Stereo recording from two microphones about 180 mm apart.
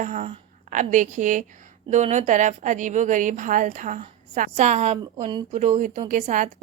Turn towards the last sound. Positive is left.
turn(degrees=-45)  # may be behind; listen again after turning